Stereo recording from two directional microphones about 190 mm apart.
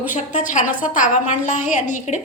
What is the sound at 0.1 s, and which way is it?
A woman's voice, 40° left (ahead or behind).